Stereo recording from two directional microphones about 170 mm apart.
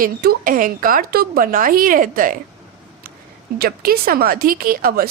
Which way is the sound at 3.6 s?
60° right (ahead or behind).